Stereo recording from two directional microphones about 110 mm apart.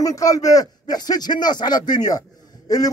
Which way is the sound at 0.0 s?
30° left (ahead or behind).